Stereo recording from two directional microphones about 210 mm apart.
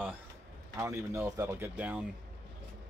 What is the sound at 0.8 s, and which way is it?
Speech, 15° right (ahead or behind).